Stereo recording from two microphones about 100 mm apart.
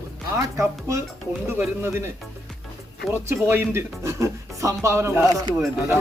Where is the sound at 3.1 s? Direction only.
25° right (ahead or behind).